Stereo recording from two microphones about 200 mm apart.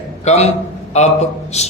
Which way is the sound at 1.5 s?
35° left (ahead or behind).